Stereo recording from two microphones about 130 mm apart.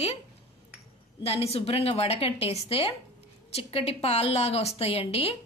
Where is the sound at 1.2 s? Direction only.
50° left (ahead or behind).